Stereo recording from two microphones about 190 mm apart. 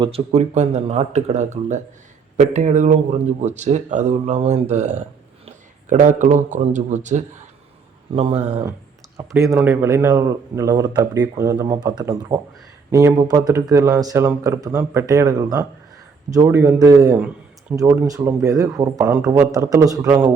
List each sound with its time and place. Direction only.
0.0 s speech: 30° right (ahead or behind)
9.4 s speech: 15° right (ahead or behind)